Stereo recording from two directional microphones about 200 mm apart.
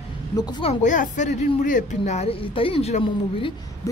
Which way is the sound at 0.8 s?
40° left (ahead or behind).